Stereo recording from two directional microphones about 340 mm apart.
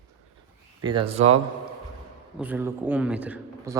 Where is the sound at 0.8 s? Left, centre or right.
Centre.